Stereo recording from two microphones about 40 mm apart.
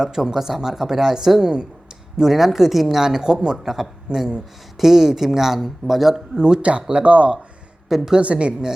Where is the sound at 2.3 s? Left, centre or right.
Centre; by 4.2 s right.